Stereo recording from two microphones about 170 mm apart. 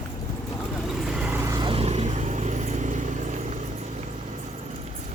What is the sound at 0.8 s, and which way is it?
Vehicle, centre (ahead or behind).